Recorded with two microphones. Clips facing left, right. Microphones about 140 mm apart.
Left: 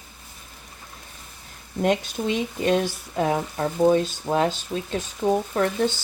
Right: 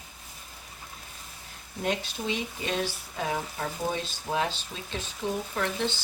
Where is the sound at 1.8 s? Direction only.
50° left (ahead or behind).